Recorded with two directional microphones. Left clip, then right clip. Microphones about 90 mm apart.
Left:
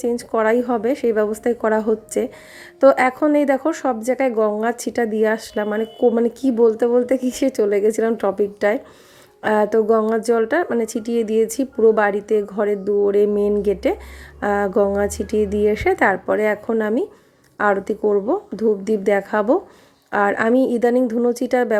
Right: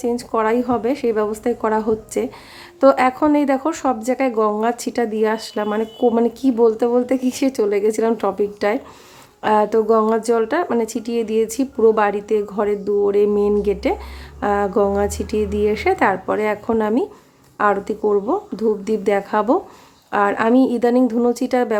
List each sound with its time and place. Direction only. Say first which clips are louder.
0.0 s speech: even; 35° left (ahead or behind)